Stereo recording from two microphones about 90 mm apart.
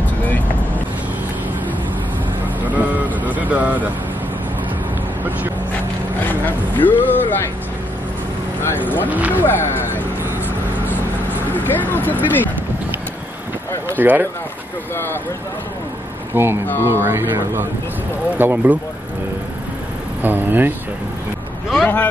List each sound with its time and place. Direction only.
2.7 s vehicle: 20° right (ahead or behind)
6.4 s speech: 20° left (ahead or behind)
8.6 s speech: 20° left (ahead or behind)
10.9 s vehicle: 20° left (ahead or behind)
13.8 s speech: 20° right (ahead or behind)
16.3 s speech: 20° right (ahead or behind)
20.2 s speech: 20° right (ahead or behind)
21.8 s speech: 20° left (ahead or behind)